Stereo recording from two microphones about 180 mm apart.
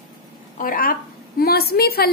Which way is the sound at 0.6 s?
50° left (ahead or behind).